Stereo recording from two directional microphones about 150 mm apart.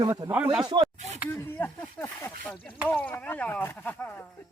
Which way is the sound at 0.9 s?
50° right (ahead or behind).